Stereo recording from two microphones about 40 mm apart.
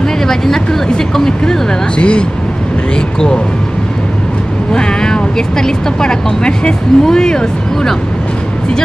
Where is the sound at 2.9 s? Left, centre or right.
Centre.